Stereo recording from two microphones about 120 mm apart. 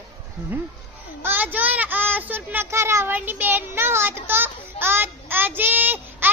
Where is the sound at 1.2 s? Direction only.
15° right (ahead or behind).